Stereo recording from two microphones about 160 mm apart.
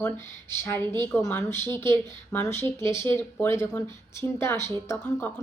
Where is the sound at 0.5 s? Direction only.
15° left (ahead or behind).